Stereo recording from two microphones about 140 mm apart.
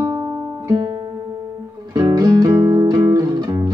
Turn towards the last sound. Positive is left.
turn(degrees=-30)  # may be behind; listen again after turning